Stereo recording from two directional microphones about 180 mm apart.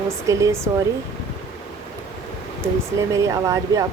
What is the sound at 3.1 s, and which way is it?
Speech, 15° right (ahead or behind).